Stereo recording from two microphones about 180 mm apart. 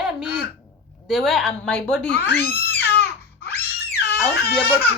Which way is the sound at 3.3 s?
60° left (ahead or behind).